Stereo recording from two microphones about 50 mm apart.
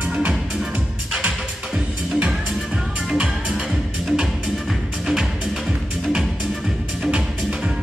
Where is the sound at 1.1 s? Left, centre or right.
Right.